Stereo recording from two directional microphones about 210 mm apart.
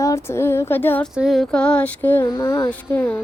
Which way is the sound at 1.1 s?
Centre (ahead or behind).